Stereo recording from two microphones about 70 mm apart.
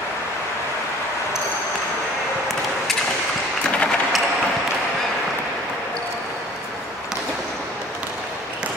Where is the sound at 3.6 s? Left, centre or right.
Centre.